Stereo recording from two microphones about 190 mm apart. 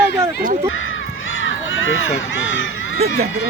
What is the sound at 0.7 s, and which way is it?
Run, 90° left.